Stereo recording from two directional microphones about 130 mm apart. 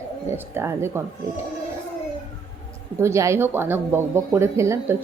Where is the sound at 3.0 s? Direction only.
20° right (ahead or behind).